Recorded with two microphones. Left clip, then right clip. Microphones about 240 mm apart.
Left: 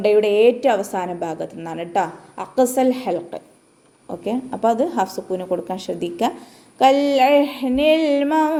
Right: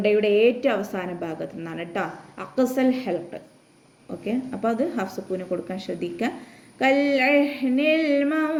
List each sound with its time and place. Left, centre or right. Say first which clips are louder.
0.0 s a woman's voice: left 4 dB; centre